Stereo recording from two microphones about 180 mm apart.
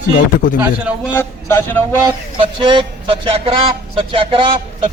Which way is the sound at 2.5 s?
30° right (ahead or behind).